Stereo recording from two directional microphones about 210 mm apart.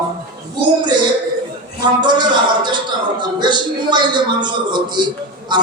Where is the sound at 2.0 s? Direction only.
20° right (ahead or behind).